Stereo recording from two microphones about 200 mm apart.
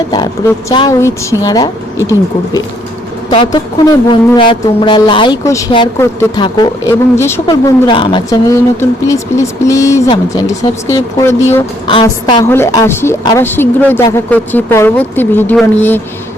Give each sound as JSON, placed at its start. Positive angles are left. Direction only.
{"t": 0.1, "sound": "speech", "side_deg": 20}
{"t": 3.3, "sound": "speech", "side_deg": 20}
{"t": 7.4, "sound": "a woman's voice", "side_deg": 25}